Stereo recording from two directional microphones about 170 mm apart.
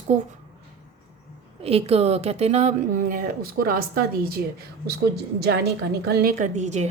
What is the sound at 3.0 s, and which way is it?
Speech, 55° right (ahead or behind).